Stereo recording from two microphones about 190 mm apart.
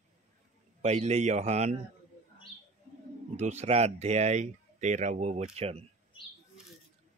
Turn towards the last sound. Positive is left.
turn(degrees=-30)  # may be behind; listen again after turning